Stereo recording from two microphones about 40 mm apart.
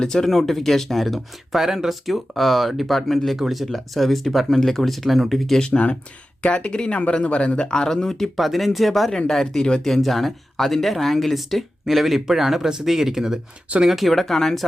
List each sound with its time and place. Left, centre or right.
0.0 s speech: centre
0.3 s speech: centre
5.5 s speech: left
8.4 s speech: centre
9.1 s speech: centre
14.1 s speech: centre